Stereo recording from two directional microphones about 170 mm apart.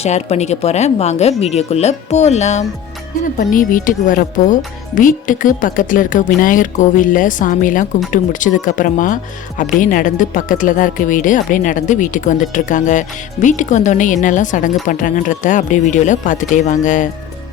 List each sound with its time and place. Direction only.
0.0 s speech: 40° left (ahead or behind)